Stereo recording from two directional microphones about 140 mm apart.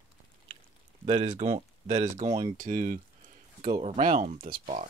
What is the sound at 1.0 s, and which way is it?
Speech, 50° right (ahead or behind).